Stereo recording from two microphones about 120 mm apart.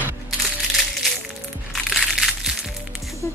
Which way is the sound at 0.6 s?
Centre (ahead or behind).